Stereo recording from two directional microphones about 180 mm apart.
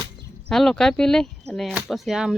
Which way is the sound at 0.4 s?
5° left (ahead or behind).